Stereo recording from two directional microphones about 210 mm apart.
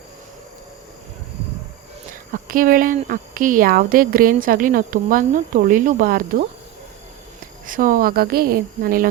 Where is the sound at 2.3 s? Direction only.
40° right (ahead or behind).